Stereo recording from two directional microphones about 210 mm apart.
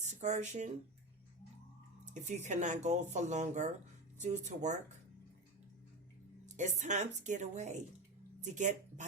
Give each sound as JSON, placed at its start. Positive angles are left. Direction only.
{"t": 0.0, "sound": "speech", "side_deg": -35}
{"t": 2.1, "sound": "speech", "side_deg": -35}
{"t": 6.4, "sound": "speech", "side_deg": -35}